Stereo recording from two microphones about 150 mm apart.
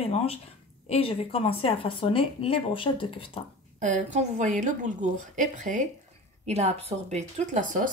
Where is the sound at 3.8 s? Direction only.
55° right (ahead or behind).